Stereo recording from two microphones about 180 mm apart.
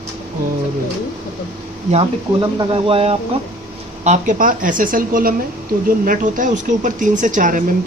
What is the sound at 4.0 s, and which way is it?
Speech, 45° right (ahead or behind).